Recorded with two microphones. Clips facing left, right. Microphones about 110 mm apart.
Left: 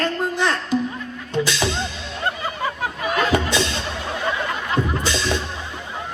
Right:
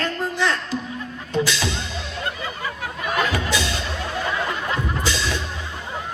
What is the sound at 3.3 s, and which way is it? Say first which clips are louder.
Music: left 4 dB; 20° left (ahead or behind).